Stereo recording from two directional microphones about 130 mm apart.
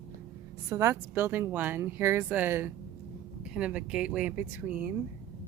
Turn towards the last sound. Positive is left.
turn(degrees=-10)  # may be behind; listen again after turning